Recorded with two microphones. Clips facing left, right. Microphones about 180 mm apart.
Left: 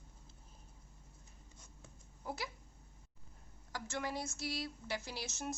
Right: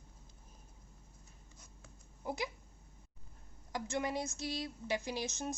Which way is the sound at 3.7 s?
20° right (ahead or behind).